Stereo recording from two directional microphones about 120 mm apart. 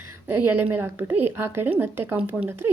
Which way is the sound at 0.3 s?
20° right (ahead or behind).